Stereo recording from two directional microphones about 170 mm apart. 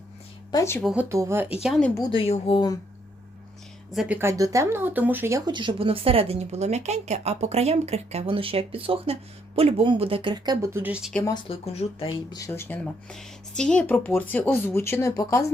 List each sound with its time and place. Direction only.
0.5 s speech: 15° left (ahead or behind)
0.8 s speech: centre (ahead or behind)
1.0 s speech: 15° right (ahead or behind)
1.6 s speech: centre (ahead or behind)
2.0 s speech: 30° left (ahead or behind)
3.9 s speech: 10° right (ahead or behind)
5.5 s speech: 30° right (ahead or behind); by 11.1 s 10° right (ahead or behind)
11.3 s speech: 35° left (ahead or behind)
12.5 s speech: 10° left (ahead or behind)